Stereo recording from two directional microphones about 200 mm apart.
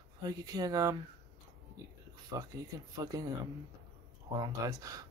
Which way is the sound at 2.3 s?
20° right (ahead or behind).